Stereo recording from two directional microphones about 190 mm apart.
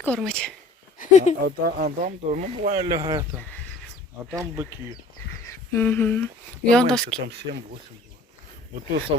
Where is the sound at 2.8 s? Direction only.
20° right (ahead or behind).